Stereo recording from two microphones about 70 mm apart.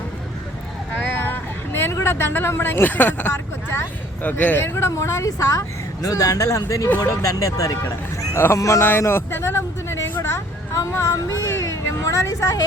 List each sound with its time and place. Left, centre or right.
0.9 s vehicle: left
4.6 s a woman's voice: left
6.8 s speech: left
7.2 s a woman's voice: left
8.8 s speech: left